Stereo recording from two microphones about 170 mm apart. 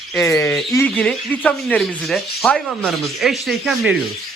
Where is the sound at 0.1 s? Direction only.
15° left (ahead or behind).